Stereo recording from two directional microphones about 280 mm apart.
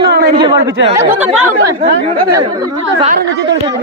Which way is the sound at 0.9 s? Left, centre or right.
Centre.